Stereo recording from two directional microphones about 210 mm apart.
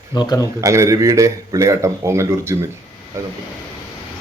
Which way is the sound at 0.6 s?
15° right (ahead or behind).